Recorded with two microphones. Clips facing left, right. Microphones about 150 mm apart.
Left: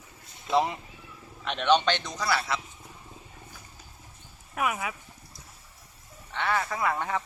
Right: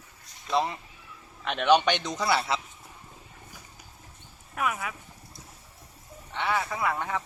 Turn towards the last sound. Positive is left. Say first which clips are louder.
# even
turn(degrees=-5)  # may be behind; listen again after turning